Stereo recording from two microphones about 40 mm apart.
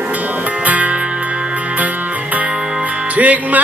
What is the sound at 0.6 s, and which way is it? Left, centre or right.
Music, right.